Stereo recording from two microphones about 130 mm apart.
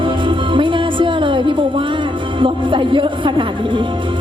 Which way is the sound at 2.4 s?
40° right (ahead or behind).